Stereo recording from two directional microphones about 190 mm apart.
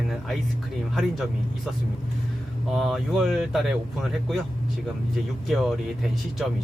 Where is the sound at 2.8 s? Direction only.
Centre (ahead or behind).